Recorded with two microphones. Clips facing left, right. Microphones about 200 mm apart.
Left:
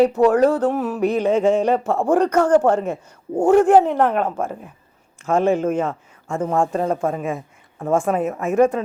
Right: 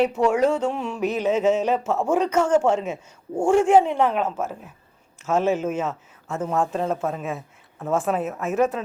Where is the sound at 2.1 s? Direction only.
60° left (ahead or behind).